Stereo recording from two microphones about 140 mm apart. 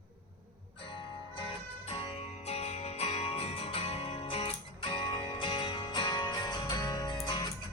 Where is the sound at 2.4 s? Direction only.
50° left (ahead or behind).